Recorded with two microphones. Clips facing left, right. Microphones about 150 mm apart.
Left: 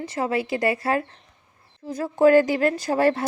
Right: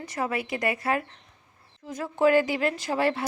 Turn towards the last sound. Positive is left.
turn(degrees=45)  # may be behind; listen again after turning